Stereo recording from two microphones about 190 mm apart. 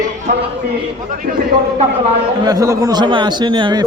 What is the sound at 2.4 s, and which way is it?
A man's voice, 20° right (ahead or behind).